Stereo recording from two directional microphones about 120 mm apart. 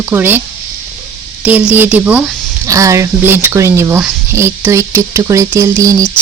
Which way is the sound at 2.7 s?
25° right (ahead or behind).